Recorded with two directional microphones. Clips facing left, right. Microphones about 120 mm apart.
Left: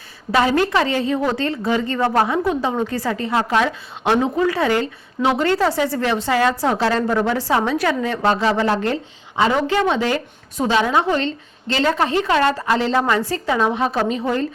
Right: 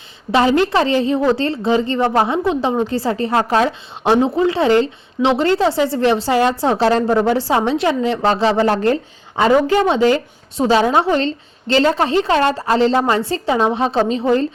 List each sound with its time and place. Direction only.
0.3 s a woman's voice: 25° right (ahead or behind)